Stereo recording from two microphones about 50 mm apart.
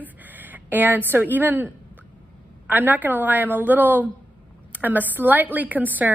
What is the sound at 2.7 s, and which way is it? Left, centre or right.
A woman's voice, right.